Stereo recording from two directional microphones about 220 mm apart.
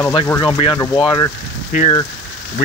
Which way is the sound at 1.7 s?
35° left (ahead or behind).